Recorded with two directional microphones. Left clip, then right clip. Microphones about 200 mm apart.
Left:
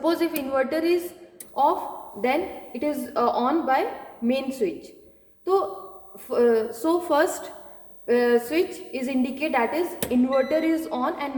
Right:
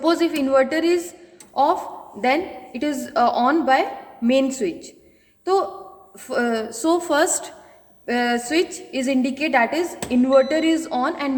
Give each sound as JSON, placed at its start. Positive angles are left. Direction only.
{"t": 0.0, "sound": "a woman's voice", "side_deg": -40}
{"t": 6.2, "sound": "a woman's voice", "side_deg": -40}